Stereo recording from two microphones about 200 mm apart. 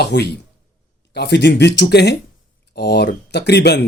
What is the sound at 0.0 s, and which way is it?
Speech, 55° left (ahead or behind).